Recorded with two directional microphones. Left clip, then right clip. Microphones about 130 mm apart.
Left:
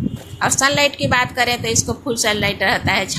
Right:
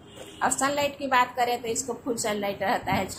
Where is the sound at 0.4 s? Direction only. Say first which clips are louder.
Left 9 dB; 15° left (ahead or behind).